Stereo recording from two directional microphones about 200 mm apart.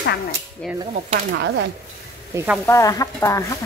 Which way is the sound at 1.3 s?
65° right (ahead or behind).